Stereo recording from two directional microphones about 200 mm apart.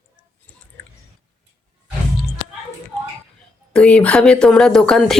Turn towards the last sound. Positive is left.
turn(degrees=5)  # may be behind; listen again after turning